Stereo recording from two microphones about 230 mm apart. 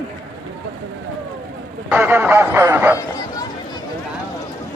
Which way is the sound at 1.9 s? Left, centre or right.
Centre.